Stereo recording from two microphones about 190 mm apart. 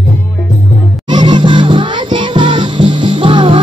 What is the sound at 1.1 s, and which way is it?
Music, 25° right (ahead or behind).